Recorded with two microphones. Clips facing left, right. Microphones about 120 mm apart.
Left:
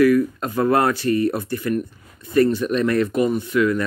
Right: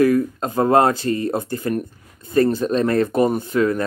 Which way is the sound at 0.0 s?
30° right (ahead or behind).